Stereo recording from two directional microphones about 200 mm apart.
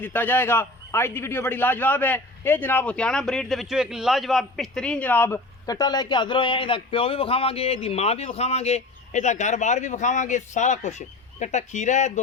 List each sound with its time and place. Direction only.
0.0 s a man's voice: 10° left (ahead or behind); by 12.2 s 35° left (ahead or behind)